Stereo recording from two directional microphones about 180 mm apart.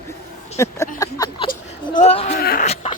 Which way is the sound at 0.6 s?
15° left (ahead or behind).